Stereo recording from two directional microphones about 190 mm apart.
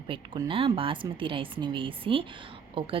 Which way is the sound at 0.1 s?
25° right (ahead or behind).